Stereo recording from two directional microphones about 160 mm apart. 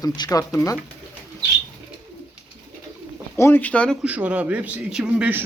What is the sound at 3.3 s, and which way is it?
Speech, 15° left (ahead or behind).